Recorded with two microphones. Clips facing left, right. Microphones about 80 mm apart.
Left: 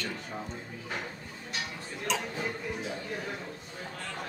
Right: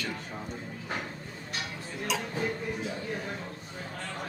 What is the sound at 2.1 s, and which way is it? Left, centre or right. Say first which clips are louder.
Speech: even; centre.